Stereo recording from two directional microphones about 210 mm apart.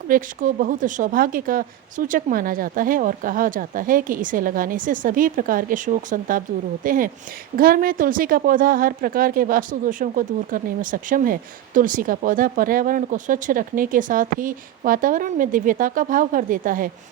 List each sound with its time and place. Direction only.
0.1 s a woman's voice: 40° right (ahead or behind)